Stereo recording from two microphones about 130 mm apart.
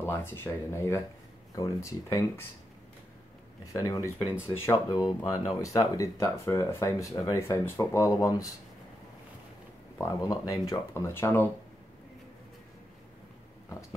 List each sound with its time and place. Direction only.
0.0 s speech: 20° left (ahead or behind)
3.7 s speech: 25° left (ahead or behind)
9.9 s speech: 30° left (ahead or behind)